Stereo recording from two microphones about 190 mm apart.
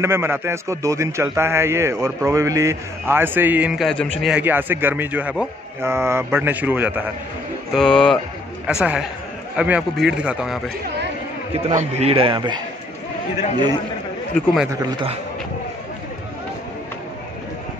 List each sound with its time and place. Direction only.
0.0 s a man's voice: 15° right (ahead or behind)
7.7 s a man's voice: 5° left (ahead or behind)
11.5 s a man's voice: 35° right (ahead or behind)
14.3 s a man's voice: centre (ahead or behind)
14.7 s a man's voice: 20° right (ahead or behind)